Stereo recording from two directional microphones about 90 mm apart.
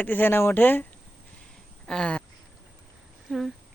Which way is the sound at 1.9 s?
10° left (ahead or behind).